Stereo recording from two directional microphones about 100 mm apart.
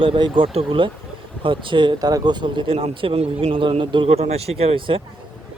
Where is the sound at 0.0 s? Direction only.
60° right (ahead or behind).